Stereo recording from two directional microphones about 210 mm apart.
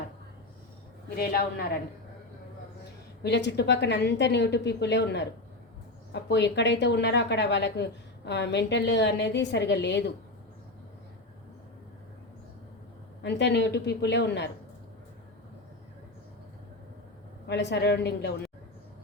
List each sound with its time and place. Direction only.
1.1 s a woman's voice: 45° left (ahead or behind)
3.2 s a woman's voice: 55° left (ahead or behind)
13.2 s a woman's voice: 55° left (ahead or behind)
17.4 s a woman's voice: 55° left (ahead or behind)